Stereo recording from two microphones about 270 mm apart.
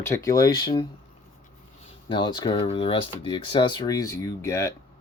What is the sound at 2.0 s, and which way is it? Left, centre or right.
Speech, centre.